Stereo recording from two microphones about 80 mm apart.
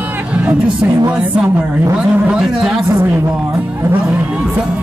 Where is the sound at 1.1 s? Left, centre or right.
Centre.